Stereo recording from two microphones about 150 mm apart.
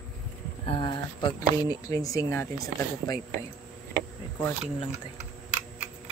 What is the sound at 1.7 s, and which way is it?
A woman's voice, 25° left (ahead or behind).